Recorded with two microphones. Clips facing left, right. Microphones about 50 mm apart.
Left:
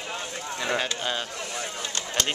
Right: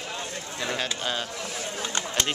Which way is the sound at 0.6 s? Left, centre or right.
Centre.